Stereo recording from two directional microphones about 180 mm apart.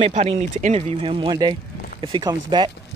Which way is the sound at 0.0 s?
35° right (ahead or behind).